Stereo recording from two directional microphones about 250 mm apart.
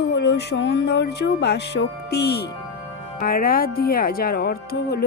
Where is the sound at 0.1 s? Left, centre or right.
Left.